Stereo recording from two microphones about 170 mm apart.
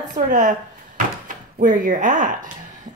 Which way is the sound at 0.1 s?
50° right (ahead or behind).